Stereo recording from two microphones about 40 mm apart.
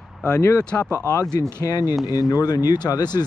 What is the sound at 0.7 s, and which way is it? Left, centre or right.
Speech, left.